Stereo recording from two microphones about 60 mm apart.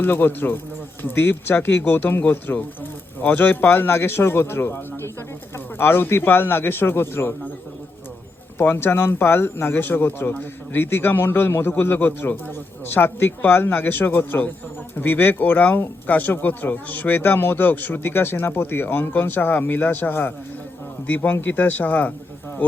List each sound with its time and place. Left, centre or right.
0.0 s speech: left
8.5 s speech: left